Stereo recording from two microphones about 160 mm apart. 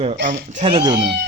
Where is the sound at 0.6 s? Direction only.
30° right (ahead or behind).